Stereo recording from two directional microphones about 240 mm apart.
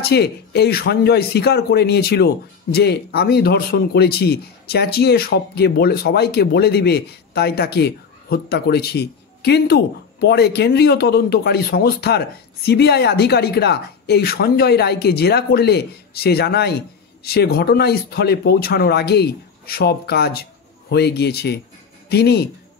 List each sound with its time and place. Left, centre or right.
0.0 s speech: left